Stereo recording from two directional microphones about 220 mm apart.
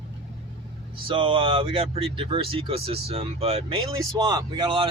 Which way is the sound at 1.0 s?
25° right (ahead or behind).